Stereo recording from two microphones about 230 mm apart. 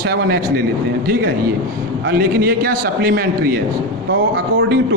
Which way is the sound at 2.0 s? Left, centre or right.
Right.